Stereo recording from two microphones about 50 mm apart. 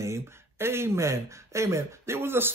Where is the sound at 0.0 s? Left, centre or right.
Right.